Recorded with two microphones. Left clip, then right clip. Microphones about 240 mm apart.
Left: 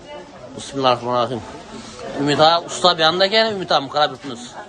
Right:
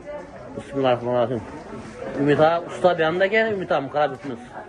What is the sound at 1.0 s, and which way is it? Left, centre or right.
A man's voice, centre.